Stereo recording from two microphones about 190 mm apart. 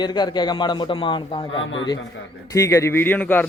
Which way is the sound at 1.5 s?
85° left.